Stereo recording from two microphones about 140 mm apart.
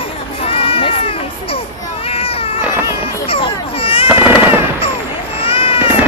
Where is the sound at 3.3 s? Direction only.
40° left (ahead or behind).